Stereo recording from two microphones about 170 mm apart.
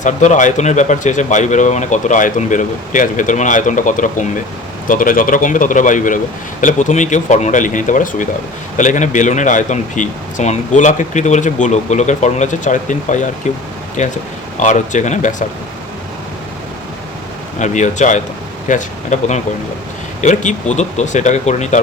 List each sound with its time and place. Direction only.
0.0 s speech: 45° left (ahead or behind)
17.6 s speech: 45° left (ahead or behind)